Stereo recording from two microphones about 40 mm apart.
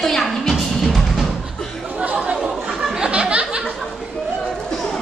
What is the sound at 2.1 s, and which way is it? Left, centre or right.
Chatter, right.